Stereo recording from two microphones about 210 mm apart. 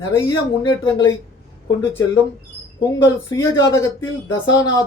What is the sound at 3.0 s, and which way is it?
Speech, 15° left (ahead or behind).